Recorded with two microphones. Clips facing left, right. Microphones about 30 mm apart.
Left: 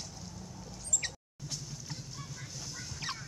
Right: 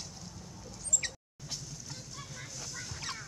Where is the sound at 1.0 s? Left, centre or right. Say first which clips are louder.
Even; centre.